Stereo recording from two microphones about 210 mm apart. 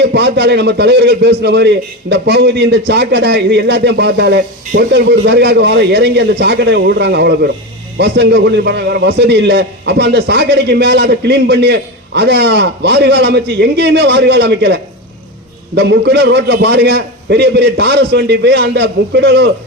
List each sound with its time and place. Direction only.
0.0 s a man's voice: 55° right (ahead or behind)